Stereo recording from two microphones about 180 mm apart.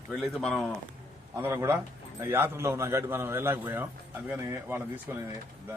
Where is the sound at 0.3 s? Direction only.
5° left (ahead or behind).